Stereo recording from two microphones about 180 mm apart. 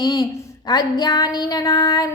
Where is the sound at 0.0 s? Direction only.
20° left (ahead or behind).